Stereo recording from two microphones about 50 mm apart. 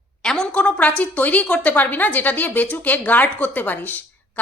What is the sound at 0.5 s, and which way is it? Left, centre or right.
A woman's voice, left.